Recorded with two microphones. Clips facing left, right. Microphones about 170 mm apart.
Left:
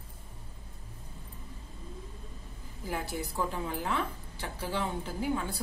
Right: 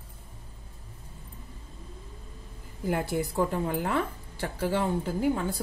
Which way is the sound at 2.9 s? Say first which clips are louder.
Right 6 dB; 55° right (ahead or behind).